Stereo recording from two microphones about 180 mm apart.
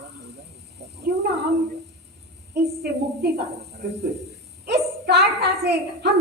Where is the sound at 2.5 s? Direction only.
60° right (ahead or behind).